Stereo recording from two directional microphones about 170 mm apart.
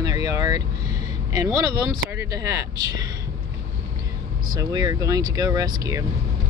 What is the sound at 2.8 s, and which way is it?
Speech, 20° right (ahead or behind).